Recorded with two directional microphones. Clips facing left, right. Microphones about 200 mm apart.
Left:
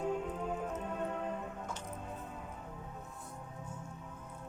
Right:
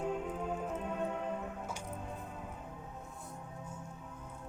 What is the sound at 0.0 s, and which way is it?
Music, 5° right (ahead or behind).